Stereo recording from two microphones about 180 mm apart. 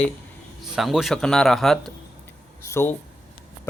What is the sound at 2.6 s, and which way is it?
Speech, 15° left (ahead or behind).